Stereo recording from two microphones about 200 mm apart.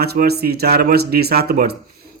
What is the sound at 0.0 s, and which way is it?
A man's voice, 50° right (ahead or behind).